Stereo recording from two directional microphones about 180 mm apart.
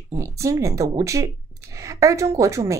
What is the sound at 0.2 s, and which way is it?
A woman's voice, 15° right (ahead or behind).